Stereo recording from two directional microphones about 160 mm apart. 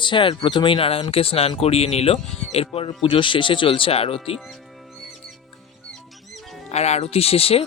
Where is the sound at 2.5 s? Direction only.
40° left (ahead or behind).